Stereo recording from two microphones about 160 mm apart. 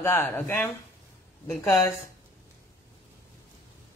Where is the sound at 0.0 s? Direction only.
15° left (ahead or behind).